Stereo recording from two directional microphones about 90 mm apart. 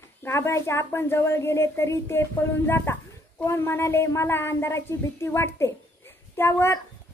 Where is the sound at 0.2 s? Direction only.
30° left (ahead or behind).